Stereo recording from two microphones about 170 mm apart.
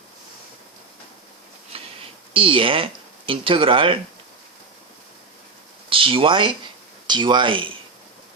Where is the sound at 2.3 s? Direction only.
30° right (ahead or behind).